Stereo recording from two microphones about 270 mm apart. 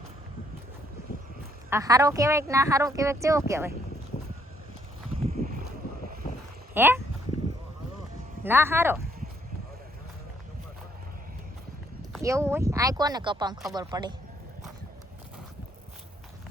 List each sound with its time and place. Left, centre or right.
1.7 s speech: centre
5.1 s a sound: right
6.7 s speech: centre
8.4 s speech: centre
12.2 s speech: centre